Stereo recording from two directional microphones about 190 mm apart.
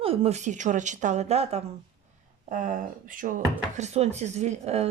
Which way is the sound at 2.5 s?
45° right (ahead or behind).